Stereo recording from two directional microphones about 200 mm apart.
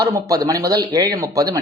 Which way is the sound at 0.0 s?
20° right (ahead or behind).